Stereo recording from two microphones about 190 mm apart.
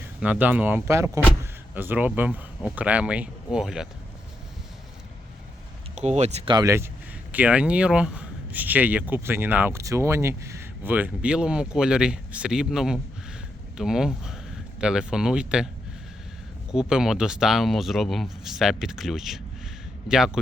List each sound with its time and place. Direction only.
0.2 s speech: 5° right (ahead or behind)
5.9 s speech: 35° right (ahead or behind)
6.5 s speech: 20° right (ahead or behind)
7.3 s speech: 5° right (ahead or behind)
16.7 s speech: 5° right (ahead or behind)